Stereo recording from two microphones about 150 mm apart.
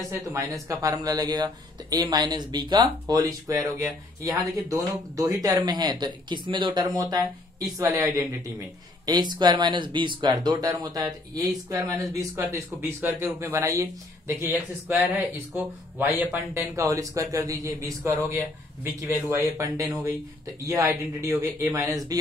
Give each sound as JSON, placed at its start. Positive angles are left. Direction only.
{"t": 0.1, "sound": "speech", "side_deg": -20}